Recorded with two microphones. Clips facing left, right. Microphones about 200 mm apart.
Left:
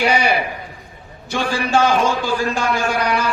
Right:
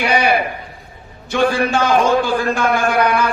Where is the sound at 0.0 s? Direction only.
55° right (ahead or behind).